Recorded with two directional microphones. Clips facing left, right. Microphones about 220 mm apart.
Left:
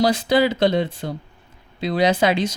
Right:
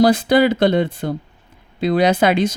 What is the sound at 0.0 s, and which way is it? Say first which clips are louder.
Speech: right 4 dB; 55° right (ahead or behind).